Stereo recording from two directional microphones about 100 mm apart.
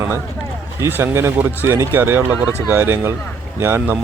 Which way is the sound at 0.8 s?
20° right (ahead or behind).